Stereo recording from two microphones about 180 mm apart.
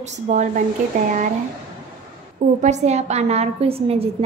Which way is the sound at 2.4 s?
40° right (ahead or behind).